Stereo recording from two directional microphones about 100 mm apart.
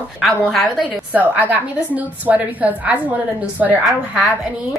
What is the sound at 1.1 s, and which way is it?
A woman's voice, 15° right (ahead or behind).